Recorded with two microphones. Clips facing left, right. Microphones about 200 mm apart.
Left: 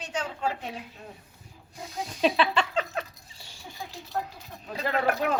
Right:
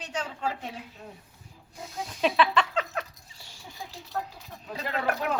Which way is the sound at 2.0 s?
30° left (ahead or behind).